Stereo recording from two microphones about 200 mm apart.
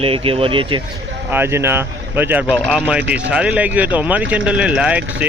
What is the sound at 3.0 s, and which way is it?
Speech, 60° right (ahead or behind).